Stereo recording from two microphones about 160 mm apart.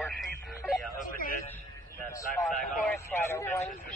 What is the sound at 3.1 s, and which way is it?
Speech, 15° left (ahead or behind).